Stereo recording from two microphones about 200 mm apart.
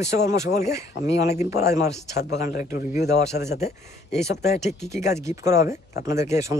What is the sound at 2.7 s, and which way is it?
Speech, 50° left (ahead or behind).